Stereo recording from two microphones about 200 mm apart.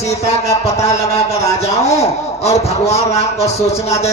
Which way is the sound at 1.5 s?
30° left (ahead or behind).